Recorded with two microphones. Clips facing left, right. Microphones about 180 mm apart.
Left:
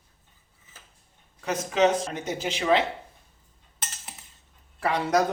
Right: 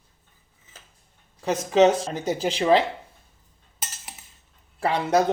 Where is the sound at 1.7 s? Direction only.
30° right (ahead or behind).